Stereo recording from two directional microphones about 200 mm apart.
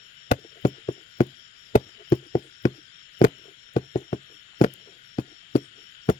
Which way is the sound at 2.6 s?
15° left (ahead or behind).